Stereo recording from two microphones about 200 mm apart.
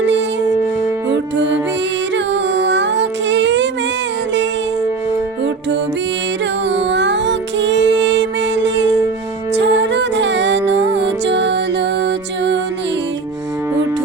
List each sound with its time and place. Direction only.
2.1 s music: 65° right (ahead or behind)
6.7 s music: 60° right (ahead or behind)